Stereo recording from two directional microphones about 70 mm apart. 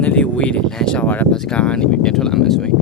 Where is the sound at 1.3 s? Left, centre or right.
Centre.